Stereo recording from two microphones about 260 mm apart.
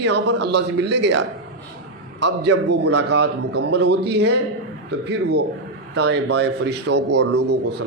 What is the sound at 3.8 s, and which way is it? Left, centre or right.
A man's voice, right.